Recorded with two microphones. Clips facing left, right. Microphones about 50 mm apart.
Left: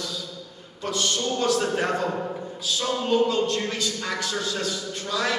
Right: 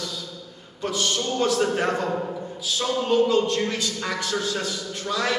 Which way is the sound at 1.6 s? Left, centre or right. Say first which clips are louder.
Right 2 dB; centre.